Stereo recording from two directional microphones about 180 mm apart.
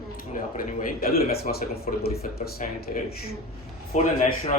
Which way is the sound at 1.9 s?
40° left (ahead or behind).